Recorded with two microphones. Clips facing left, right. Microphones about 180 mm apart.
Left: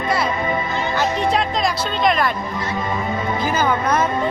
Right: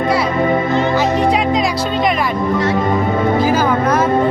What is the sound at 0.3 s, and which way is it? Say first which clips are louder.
Music: right 8 dB; 50° right (ahead or behind).